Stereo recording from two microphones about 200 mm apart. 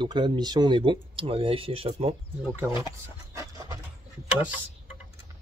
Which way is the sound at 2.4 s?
10° right (ahead or behind).